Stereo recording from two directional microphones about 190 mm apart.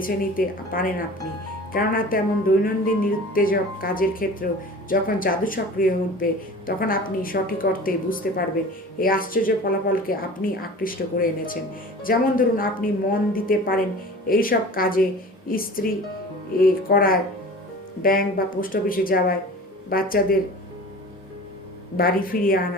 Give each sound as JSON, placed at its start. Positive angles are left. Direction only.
{"t": 0.0, "sound": "a woman's voice", "side_deg": 50}
{"t": 21.9, "sound": "a woman's voice", "side_deg": 50}